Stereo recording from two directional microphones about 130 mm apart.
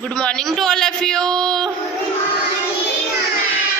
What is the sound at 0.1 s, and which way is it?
A man's voice, 5° left (ahead or behind).